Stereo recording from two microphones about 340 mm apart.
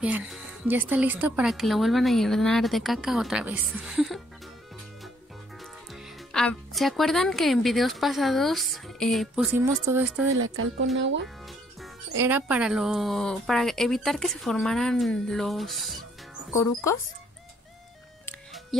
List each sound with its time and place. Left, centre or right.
0.0 s speech: centre
6.3 s speech: centre
10.4 s speech: right
12.2 s a child's voice: centre
18.2 s music: centre